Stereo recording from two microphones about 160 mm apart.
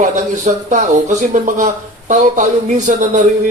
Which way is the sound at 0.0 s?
50° right (ahead or behind).